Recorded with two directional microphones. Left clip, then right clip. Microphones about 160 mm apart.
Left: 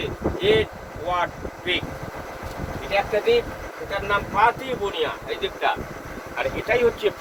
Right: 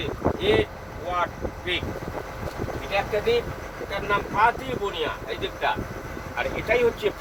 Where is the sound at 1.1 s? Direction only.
Centre (ahead or behind).